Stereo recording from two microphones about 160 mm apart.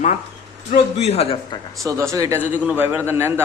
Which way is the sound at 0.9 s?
40° left (ahead or behind).